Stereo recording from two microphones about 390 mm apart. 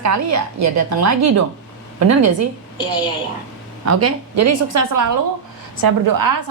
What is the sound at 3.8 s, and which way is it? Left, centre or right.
A woman's voice, right.